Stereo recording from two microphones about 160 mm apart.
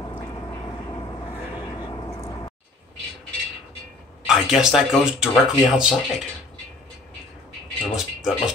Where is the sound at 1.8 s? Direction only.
25° left (ahead or behind).